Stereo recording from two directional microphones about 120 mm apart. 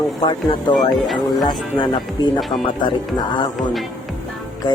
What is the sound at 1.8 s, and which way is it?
Speech, 40° left (ahead or behind).